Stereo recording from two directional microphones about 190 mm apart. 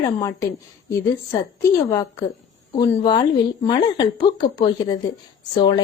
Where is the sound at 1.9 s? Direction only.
15° left (ahead or behind).